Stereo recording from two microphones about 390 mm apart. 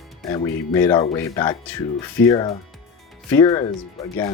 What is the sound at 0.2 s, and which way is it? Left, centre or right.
Speech, centre.